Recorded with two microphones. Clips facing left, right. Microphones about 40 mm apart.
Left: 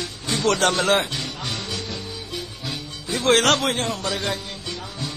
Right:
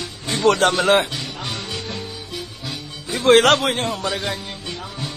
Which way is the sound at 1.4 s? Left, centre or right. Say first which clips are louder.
Right 1 dB; centre.